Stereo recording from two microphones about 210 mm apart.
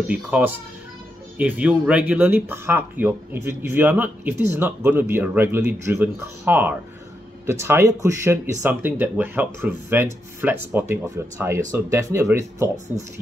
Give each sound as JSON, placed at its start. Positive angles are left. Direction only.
{"t": 0.1, "sound": "speech", "side_deg": -5}
{"t": 12.7, "sound": "speech", "side_deg": -35}